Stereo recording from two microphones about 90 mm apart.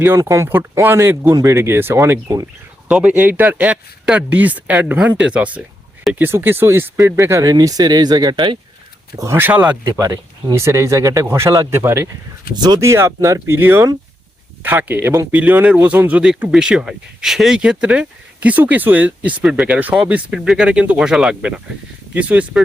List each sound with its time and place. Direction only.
0.0 s speech: 30° right (ahead or behind)
2.9 s speech: 15° right (ahead or behind); by 7.5 s 30° right (ahead or behind)
7.5 s speech: 45° right (ahead or behind); by 8.5 s 60° right (ahead or behind)
9.1 s speech: 35° right (ahead or behind)
12.5 s speech: 50° right (ahead or behind)
12.8 s speech: 30° right (ahead or behind)
13.6 s speech: 25° right (ahead or behind)